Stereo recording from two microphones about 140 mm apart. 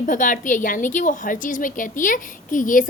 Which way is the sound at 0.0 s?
70° left (ahead or behind).